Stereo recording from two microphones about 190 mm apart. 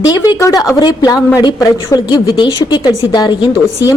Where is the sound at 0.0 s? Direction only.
20° left (ahead or behind).